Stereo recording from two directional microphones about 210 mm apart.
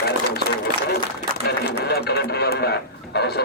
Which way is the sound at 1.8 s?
50° left (ahead or behind).